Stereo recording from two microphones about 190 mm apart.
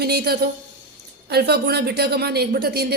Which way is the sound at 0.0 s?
55° right (ahead or behind).